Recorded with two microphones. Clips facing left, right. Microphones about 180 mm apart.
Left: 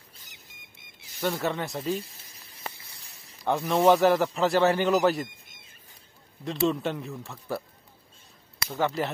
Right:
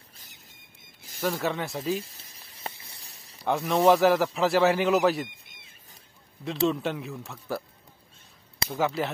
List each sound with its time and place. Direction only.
1.2 s speech: centre (ahead or behind)
2.4 s snake: 30° right (ahead or behind)
3.4 s speech: centre (ahead or behind)
6.4 s speech: centre (ahead or behind)
8.7 s speech: 5° right (ahead or behind)